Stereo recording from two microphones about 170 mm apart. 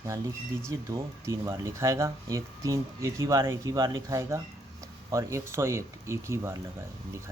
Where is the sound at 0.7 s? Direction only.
20° right (ahead or behind).